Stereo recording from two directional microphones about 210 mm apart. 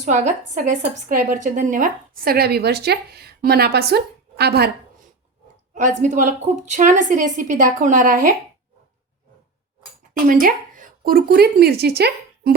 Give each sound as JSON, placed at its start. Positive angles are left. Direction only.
{"t": 0.0, "sound": "speech", "side_deg": -35}
{"t": 5.7, "sound": "a woman's voice", "side_deg": -35}
{"t": 10.2, "sound": "speech", "side_deg": -40}